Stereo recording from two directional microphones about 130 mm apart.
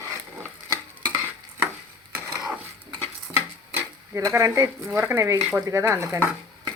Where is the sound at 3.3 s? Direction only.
20° right (ahead or behind).